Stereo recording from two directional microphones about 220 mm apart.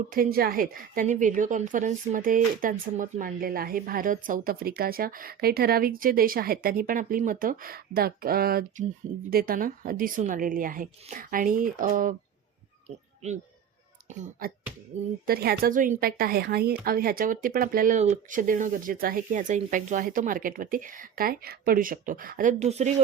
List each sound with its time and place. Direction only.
0.1 s a woman's voice: 40° right (ahead or behind)
14.1 s a woman's voice: 35° right (ahead or behind)
15.3 s a woman's voice: 45° right (ahead or behind)